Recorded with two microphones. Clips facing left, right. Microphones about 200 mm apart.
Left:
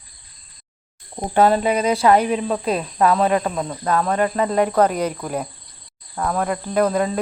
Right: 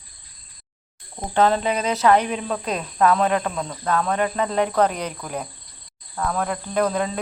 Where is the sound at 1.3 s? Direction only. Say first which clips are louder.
Left 3 dB; 10° left (ahead or behind).